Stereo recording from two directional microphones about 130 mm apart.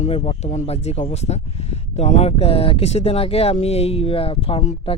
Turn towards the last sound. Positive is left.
turn(degrees=50)  # may be behind; listen again after turning